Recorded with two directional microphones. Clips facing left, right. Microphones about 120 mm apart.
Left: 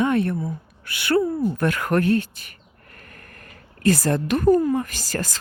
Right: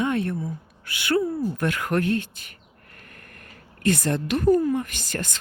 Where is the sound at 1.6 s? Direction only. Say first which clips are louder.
Left 3 dB; 50° left (ahead or behind).